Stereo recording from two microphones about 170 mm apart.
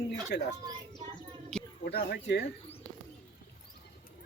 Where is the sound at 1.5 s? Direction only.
5° left (ahead or behind).